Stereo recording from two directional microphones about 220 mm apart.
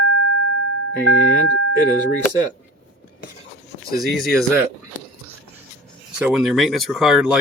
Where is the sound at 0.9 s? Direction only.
70° left (ahead or behind).